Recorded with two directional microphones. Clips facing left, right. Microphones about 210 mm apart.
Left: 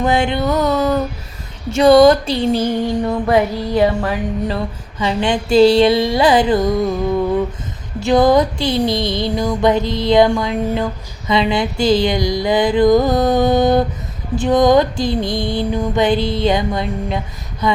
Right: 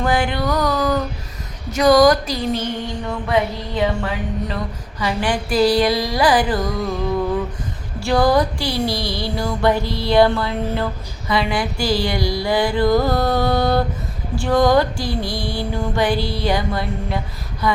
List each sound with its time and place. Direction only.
0.0 s music: 25° left (ahead or behind)
3.1 s a sound: 40° left (ahead or behind)
4.9 s music: 25° left (ahead or behind)
7.9 s music: 20° left (ahead or behind)